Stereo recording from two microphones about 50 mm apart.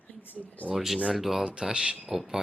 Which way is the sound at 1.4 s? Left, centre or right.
Centre.